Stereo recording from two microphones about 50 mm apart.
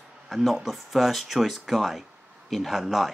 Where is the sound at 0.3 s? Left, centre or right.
Centre.